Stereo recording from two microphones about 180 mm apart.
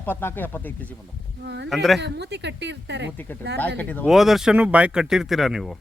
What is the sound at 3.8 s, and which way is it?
Speech, 10° left (ahead or behind).